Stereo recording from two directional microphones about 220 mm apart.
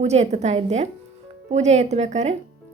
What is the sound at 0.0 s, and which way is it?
Speech, 30° right (ahead or behind).